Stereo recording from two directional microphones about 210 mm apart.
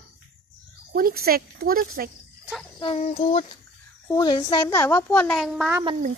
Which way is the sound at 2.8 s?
30° left (ahead or behind).